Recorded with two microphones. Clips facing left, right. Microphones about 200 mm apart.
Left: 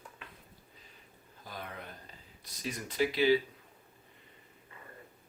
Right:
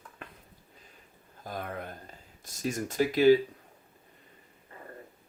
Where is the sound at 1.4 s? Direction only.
50° right (ahead or behind).